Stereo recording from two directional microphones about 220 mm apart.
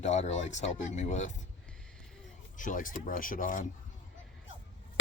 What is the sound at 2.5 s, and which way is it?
Speech, 35° left (ahead or behind).